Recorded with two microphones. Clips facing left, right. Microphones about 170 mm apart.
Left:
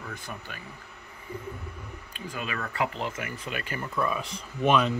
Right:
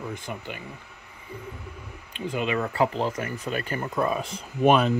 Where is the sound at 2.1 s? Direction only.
25° right (ahead or behind).